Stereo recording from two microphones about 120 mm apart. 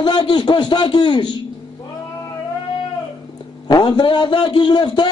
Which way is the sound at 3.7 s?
40° left (ahead or behind).